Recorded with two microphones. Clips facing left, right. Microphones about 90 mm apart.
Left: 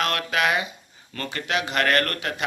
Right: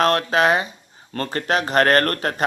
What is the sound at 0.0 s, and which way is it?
A man's voice, 35° right (ahead or behind).